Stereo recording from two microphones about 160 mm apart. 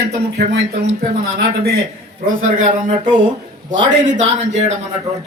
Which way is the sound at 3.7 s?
50° right (ahead or behind).